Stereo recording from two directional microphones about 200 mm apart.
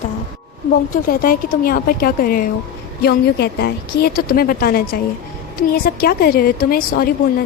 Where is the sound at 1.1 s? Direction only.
45° left (ahead or behind).